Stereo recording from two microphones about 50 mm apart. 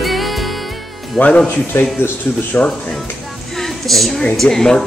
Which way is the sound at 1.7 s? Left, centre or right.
Left.